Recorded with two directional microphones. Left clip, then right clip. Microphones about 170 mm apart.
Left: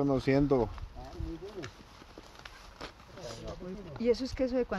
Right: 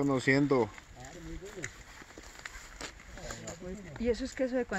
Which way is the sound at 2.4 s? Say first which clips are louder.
Right 3 dB; 50° right (ahead or behind).